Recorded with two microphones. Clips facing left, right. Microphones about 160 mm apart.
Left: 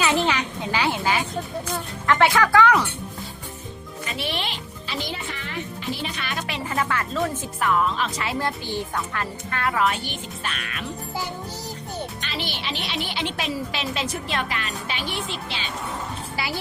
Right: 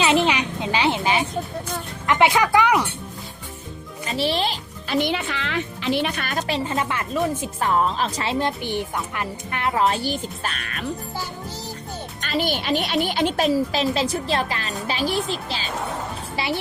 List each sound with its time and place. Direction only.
0.0 s a sound: 20° right (ahead or behind)
2.0 s music: 15° right (ahead or behind)
4.0 s music: 35° right (ahead or behind)
4.9 s music: 80° right; by 6.4 s 50° right (ahead or behind)
6.5 s speech: 25° right (ahead or behind)
7.6 s speech: 35° right (ahead or behind)
12.2 s speech: 45° right (ahead or behind)
16.3 s dishes: 25° right (ahead or behind)